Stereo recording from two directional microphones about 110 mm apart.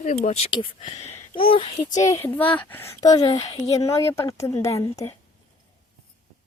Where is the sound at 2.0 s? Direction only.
25° left (ahead or behind).